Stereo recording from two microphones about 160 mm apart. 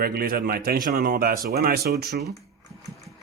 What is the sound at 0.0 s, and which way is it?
Speech, 70° right (ahead or behind).